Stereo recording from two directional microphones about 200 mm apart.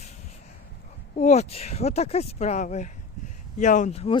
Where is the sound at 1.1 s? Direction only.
35° left (ahead or behind).